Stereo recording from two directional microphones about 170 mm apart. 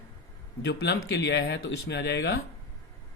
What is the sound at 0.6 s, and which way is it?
Speech, 75° left (ahead or behind).